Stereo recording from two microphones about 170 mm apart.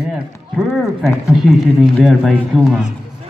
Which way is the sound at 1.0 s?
Centre (ahead or behind).